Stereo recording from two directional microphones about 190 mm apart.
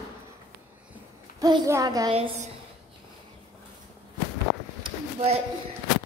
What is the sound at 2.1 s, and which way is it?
Speech, 30° right (ahead or behind).